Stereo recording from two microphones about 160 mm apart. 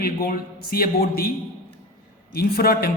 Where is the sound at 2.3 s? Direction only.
75° left (ahead or behind).